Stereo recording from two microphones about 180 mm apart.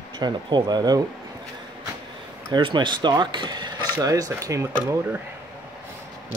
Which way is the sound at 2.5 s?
25° right (ahead or behind).